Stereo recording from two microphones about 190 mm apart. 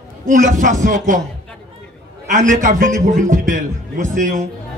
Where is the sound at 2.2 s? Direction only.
40° right (ahead or behind).